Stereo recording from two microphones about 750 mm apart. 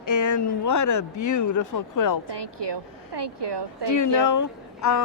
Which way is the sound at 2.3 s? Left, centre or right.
Right.